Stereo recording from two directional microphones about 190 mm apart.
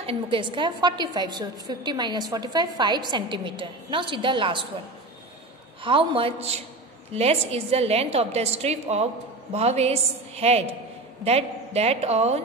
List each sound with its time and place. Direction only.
0.0 s a woman's voice: 30° right (ahead or behind)
5.9 s a woman's voice: 30° right (ahead or behind)